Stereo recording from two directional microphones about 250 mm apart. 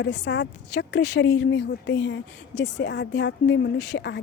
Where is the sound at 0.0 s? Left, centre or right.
Left.